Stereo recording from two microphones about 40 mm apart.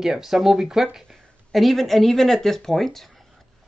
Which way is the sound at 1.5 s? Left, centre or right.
Centre.